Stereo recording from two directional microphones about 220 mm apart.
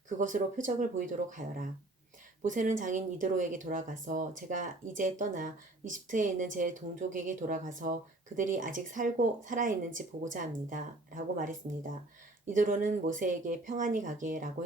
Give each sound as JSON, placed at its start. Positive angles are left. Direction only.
{"t": 0.2, "sound": "speech", "side_deg": -35}